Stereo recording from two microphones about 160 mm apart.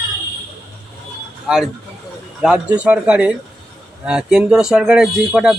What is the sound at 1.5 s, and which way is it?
Speech, 5° right (ahead or behind).